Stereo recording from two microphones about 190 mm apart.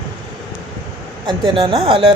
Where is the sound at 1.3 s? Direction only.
30° right (ahead or behind).